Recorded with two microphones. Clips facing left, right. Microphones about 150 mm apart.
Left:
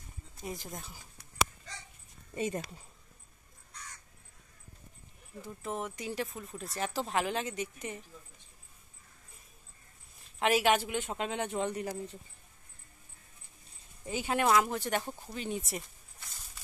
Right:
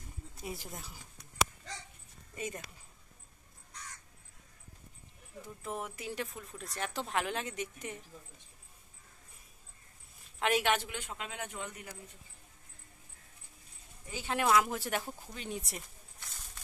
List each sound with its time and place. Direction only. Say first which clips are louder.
0.4 s speech: left 2 dB; 5° right (ahead or behind)
2.3 s speech: left 7 dB; 30° left (ahead or behind)
5.6 s speech: left 3 dB; centre (ahead or behind)
10.4 s a woman's voice: left 3 dB; 5° left (ahead or behind)
11.0 s speech: left 8 dB; 30° left (ahead or behind)
14.0 s speech: left 7 dB; 20° left (ahead or behind)
14.3 s speech: left 1 dB; centre (ahead or behind)